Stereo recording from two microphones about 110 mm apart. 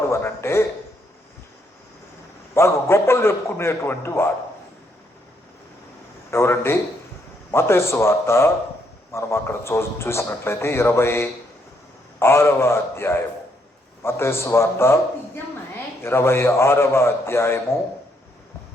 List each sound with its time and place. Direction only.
0.1 s a man's voice: 20° left (ahead or behind)
2.6 s a man's voice: 25° left (ahead or behind)
6.3 s a man's voice: 20° left (ahead or behind)
16.0 s a man's voice: 25° left (ahead or behind)